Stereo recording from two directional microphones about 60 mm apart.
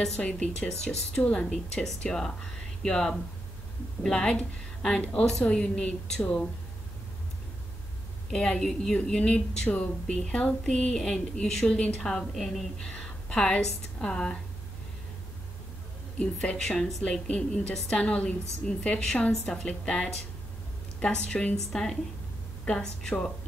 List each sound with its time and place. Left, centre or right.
0.2 s a woman's voice: centre
1.2 s speech: left
1.5 s a woman's voice: centre
8.3 s a woman's voice: centre
16.2 s a woman's voice: centre